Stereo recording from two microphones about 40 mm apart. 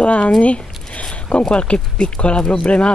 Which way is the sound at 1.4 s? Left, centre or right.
Left.